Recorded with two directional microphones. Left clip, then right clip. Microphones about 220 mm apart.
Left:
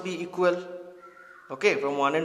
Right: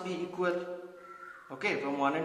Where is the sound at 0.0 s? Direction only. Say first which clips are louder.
Left 7 dB; 50° left (ahead or behind).